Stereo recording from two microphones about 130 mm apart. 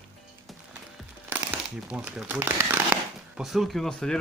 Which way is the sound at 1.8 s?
10° right (ahead or behind).